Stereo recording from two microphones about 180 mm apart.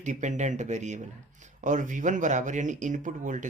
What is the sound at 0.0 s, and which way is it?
Speech, 45° right (ahead or behind).